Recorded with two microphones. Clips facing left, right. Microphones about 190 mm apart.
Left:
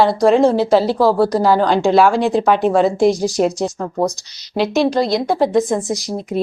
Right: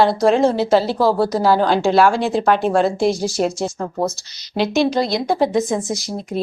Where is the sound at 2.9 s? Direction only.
15° left (ahead or behind).